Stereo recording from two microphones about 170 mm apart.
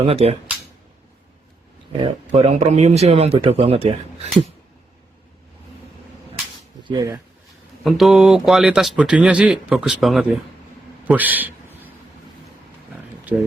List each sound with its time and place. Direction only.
0.0 s speech: 35° right (ahead or behind)
1.9 s speech: 35° right (ahead or behind)
6.8 s speech: 25° right (ahead or behind)
7.9 s speech: centre (ahead or behind)
11.0 s a sound: 10° right (ahead or behind)